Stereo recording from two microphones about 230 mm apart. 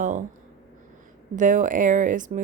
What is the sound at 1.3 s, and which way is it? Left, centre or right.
Speech, right.